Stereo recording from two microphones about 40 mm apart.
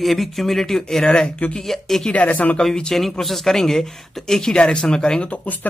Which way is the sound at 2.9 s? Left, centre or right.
Centre.